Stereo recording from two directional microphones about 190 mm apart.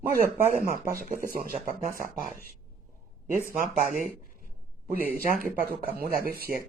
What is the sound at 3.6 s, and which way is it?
Speech, 40° right (ahead or behind).